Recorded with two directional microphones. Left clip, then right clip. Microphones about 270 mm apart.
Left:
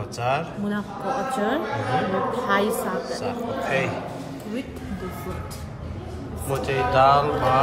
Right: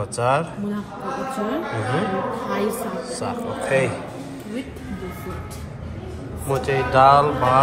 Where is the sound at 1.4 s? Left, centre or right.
Centre.